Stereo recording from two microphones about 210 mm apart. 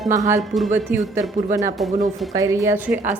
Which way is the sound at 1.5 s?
15° right (ahead or behind).